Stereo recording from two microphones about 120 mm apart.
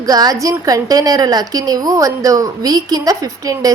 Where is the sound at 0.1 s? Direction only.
30° right (ahead or behind).